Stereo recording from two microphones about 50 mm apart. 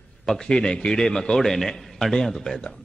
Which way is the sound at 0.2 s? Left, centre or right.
Centre.